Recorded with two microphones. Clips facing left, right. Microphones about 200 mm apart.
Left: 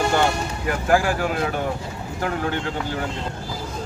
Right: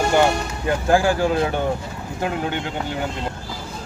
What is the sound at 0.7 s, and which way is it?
Speech, 30° right (ahead or behind).